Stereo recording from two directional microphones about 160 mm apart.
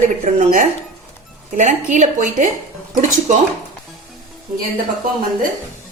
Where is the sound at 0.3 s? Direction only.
55° right (ahead or behind).